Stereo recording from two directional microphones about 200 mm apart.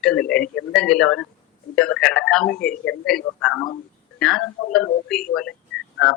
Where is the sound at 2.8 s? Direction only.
65° left (ahead or behind).